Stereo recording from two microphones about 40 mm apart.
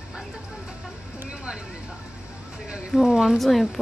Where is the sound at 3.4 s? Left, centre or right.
Centre.